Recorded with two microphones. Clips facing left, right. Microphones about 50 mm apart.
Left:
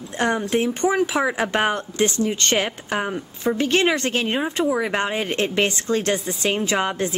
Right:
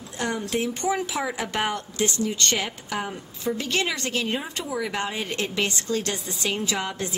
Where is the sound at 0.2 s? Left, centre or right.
Left.